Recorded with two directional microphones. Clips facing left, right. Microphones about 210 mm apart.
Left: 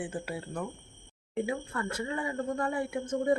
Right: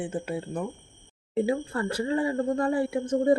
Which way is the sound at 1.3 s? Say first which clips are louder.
Right 6 dB; 35° right (ahead or behind).